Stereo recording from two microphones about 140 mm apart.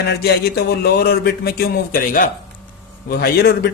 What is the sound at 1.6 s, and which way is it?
Speech, 85° left.